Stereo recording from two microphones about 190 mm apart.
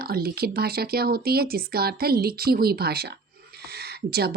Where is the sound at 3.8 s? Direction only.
55° right (ahead or behind).